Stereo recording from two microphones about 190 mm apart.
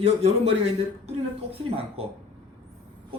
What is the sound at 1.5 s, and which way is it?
Speech, 30° right (ahead or behind).